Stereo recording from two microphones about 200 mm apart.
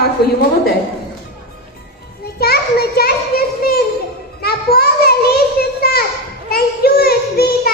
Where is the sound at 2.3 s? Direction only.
50° left (ahead or behind).